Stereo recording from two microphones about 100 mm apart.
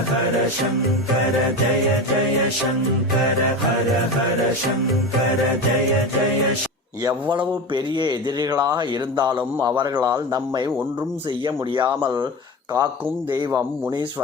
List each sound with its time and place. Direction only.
7.3 s a man's voice: 50° right (ahead or behind)